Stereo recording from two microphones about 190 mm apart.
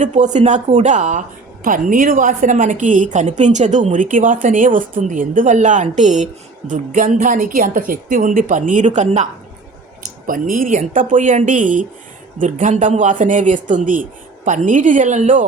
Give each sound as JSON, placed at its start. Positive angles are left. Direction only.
{"t": 0.0, "sound": "a woman's voice", "side_deg": -40}